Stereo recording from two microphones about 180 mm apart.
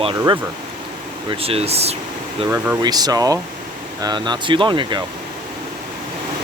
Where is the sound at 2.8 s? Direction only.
20° right (ahead or behind).